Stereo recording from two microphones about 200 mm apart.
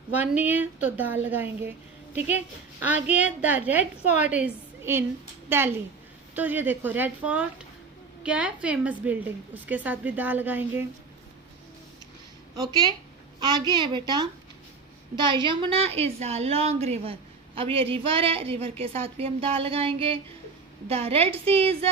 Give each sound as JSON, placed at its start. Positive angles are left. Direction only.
{"t": 0.2, "sound": "a woman's voice", "side_deg": -10}
{"t": 2.8, "sound": "a woman's voice", "side_deg": -5}
{"t": 13.4, "sound": "a woman's voice", "side_deg": -20}